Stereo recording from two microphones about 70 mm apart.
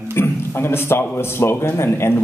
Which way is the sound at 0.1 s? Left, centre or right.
Left.